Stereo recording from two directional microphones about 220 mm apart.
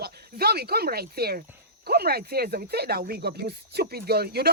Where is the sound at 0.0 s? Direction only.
45° right (ahead or behind).